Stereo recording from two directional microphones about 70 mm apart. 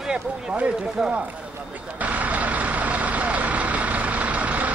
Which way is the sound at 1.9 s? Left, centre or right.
Right.